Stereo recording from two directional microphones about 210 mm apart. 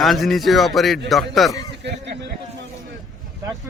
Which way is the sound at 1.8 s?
55° right (ahead or behind).